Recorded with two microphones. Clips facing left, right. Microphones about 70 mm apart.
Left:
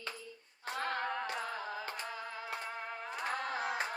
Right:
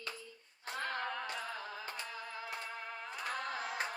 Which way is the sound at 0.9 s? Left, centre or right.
Left.